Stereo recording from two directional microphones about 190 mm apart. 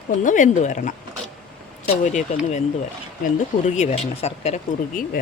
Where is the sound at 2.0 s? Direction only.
40° left (ahead or behind).